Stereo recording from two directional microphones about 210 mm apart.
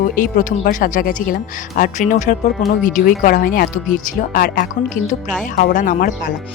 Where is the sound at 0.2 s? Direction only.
40° left (ahead or behind).